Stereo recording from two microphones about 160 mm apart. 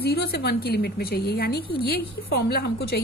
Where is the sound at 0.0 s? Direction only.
85° left.